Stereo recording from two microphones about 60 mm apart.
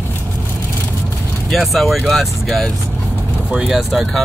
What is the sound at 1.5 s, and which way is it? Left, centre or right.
Speech, centre.